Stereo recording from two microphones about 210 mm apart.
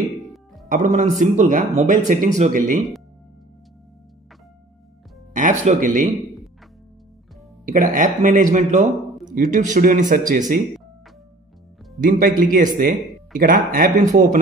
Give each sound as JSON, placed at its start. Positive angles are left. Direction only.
{"t": 0.7, "sound": "speech", "side_deg": -35}
{"t": 5.3, "sound": "speech", "side_deg": -35}
{"t": 7.6, "sound": "speech", "side_deg": -40}
{"t": 12.0, "sound": "speech", "side_deg": -40}